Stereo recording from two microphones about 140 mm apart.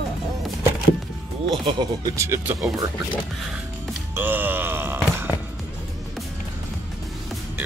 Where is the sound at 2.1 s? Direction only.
20° right (ahead or behind).